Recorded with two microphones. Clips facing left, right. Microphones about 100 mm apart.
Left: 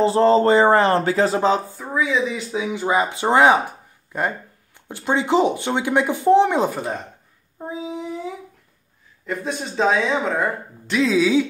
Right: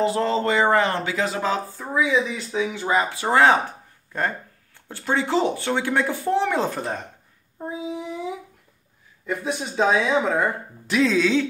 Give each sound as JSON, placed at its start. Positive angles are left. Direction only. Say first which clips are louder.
{"t": 0.0, "sound": "speech", "louder": "left 6 dB", "side_deg": 35}
{"t": 1.8, "sound": "speech", "louder": "even", "side_deg": 0}
{"t": 6.7, "sound": "speech", "louder": "left 2 dB", "side_deg": 5}
{"t": 7.5, "sound": "child singing", "louder": "left 1 dB", "side_deg": 5}
{"t": 9.2, "sound": "speech", "louder": "even", "side_deg": -5}